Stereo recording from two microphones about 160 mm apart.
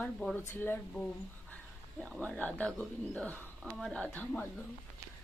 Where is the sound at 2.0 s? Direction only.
5° left (ahead or behind).